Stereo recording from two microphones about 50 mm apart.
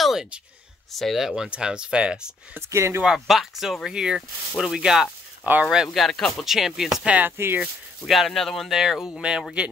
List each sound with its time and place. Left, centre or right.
0.0 s a sound: centre
0.9 s speech: centre
1.2 s speech: centre
2.7 s speech: right
3.1 s speech: centre
5.4 s speech: right
5.9 s speech: centre
7.2 s speech: right
8.0 s speech: centre
8.6 s speech: centre